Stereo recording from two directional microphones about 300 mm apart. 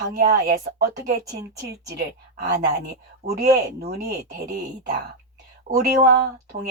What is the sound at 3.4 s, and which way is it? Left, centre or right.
Speech, right.